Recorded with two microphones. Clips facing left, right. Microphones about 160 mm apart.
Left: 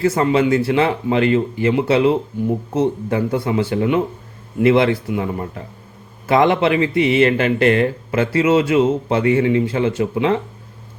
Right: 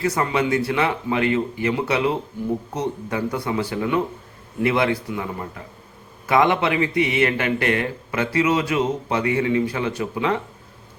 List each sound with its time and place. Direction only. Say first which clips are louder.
0.0 s speech: left 6 dB; 25° left (ahead or behind)
6.2 s speech: left 4 dB; 30° left (ahead or behind)